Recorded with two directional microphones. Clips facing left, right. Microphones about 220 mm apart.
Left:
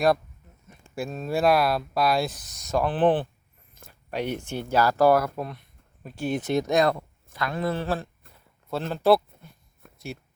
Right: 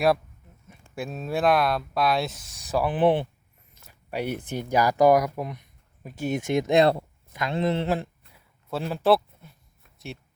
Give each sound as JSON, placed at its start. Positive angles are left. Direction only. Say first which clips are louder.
{"t": 0.7, "sound": "speech", "louder": "left 1 dB", "side_deg": 0}
{"t": 3.8, "sound": "a sound", "louder": "left 5 dB", "side_deg": 50}
{"t": 4.1, "sound": "speech", "louder": "even", "side_deg": -10}
{"t": 6.7, "sound": "speech", "louder": "right 4 dB", "side_deg": -30}
{"t": 7.3, "sound": "speech", "louder": "right 2 dB", "side_deg": -20}
{"t": 8.7, "sound": "speech", "louder": "left 1 dB", "side_deg": -5}
{"t": 9.8, "sound": "a sound", "louder": "left 11 dB", "side_deg": 50}